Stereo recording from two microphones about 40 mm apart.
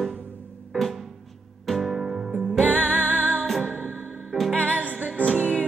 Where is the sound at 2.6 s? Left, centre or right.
Right.